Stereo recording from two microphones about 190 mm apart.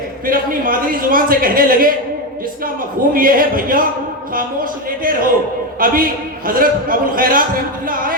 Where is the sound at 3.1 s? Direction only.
50° right (ahead or behind).